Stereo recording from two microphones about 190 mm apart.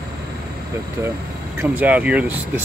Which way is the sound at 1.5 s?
10° right (ahead or behind).